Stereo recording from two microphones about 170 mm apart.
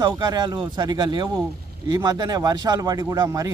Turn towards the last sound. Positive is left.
turn(degrees=-20)  # may be behind; listen again after turning